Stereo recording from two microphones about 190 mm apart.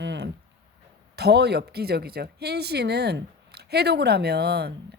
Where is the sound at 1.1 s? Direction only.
60° right (ahead or behind).